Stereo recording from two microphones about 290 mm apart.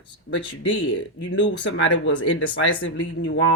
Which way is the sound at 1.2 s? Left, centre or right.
Left.